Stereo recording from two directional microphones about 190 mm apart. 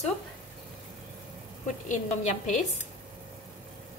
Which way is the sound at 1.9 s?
40° left (ahead or behind).